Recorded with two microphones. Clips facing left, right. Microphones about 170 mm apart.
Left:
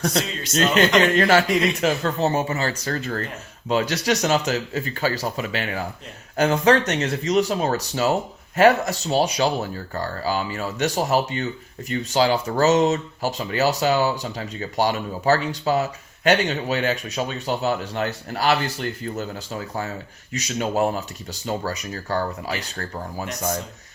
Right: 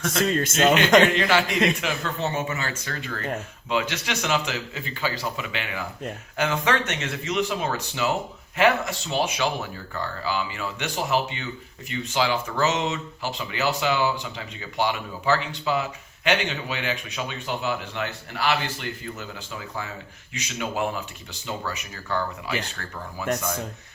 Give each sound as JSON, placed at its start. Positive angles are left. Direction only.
{"t": 0.2, "sound": "a man's voice", "side_deg": -50}
{"t": 1.1, "sound": "a man's voice", "side_deg": 45}